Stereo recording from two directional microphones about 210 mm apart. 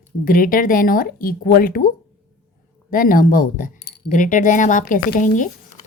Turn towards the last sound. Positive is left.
turn(degrees=40)  # may be behind; listen again after turning